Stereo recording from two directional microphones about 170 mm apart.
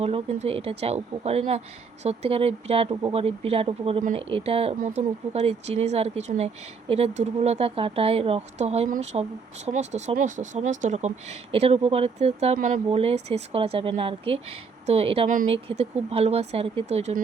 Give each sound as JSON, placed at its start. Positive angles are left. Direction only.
{"t": 0.0, "sound": "speech", "side_deg": -35}
{"t": 4.8, "sound": "speech", "side_deg": -45}